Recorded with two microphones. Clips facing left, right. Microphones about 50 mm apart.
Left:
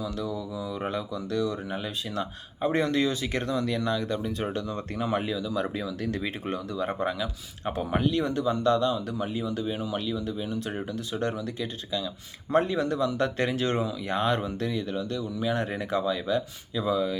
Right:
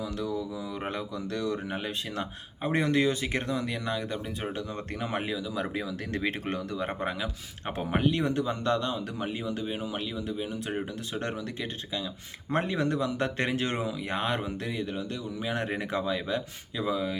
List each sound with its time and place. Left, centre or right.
0.9 s speech: right
4.9 s speech: right
6.1 s speech: right
6.7 s speech: right
10.7 s speech: centre
12.5 s speech: right